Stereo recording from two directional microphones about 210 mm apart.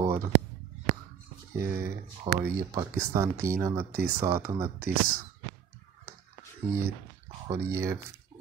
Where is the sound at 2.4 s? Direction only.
15° right (ahead or behind).